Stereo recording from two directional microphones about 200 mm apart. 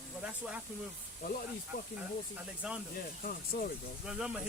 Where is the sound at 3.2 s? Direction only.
45° left (ahead or behind).